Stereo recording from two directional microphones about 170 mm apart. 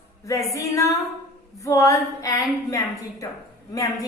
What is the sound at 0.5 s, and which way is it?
A woman's voice, 20° left (ahead or behind).